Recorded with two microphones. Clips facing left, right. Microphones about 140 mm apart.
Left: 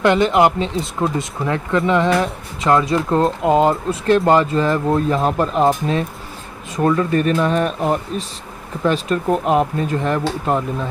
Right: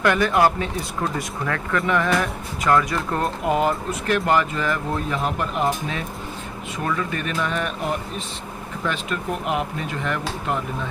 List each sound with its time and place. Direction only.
0.0 s speech: 20° left (ahead or behind)